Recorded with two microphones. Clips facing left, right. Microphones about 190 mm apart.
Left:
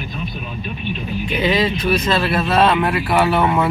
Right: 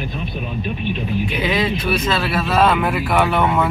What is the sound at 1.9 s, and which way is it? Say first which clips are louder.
Speech: left 2 dB; 5° right (ahead or behind).